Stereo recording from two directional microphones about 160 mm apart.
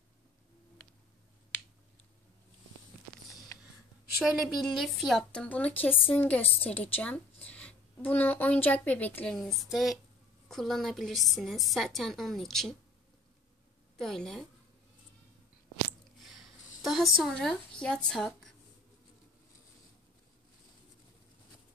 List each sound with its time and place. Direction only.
4.2 s a woman's voice: centre (ahead or behind)
13.9 s a woman's voice: 5° left (ahead or behind)
16.2 s a sound: centre (ahead or behind)
16.8 s a woman's voice: centre (ahead or behind)